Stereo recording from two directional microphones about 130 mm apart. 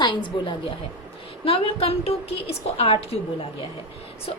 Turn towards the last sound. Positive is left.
turn(degrees=50)  # may be behind; listen again after turning